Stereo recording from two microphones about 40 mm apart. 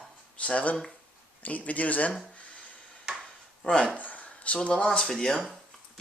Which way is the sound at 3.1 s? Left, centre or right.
Centre.